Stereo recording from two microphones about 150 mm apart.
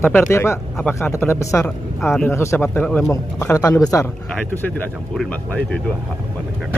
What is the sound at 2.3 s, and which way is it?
Speech, 20° left (ahead or behind).